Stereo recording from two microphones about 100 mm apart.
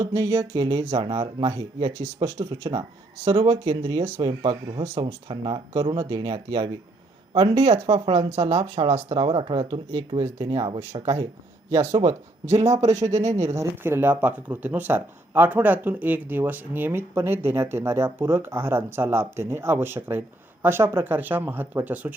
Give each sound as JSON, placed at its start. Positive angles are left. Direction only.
{"t": 0.0, "sound": "speech", "side_deg": -35}
{"t": 7.3, "sound": "speech", "side_deg": -55}
{"t": 7.6, "sound": "speech", "side_deg": -90}
{"t": 11.0, "sound": "speech", "side_deg": -30}